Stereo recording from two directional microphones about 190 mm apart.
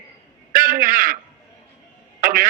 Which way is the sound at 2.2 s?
45° right (ahead or behind).